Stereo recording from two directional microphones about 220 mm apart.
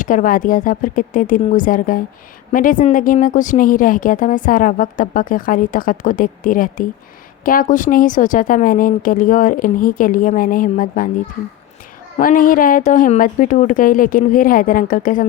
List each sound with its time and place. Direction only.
0.0 s a woman's voice: 35° left (ahead or behind)
12.1 s a woman's voice: 35° left (ahead or behind)